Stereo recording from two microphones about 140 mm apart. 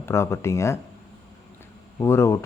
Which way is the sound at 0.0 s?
20° left (ahead or behind).